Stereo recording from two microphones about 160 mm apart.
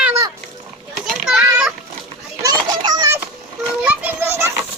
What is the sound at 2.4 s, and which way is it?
Children playing, 25° right (ahead or behind).